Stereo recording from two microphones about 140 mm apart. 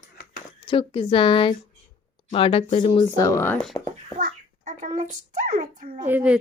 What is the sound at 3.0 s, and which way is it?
Speech, 20° left (ahead or behind).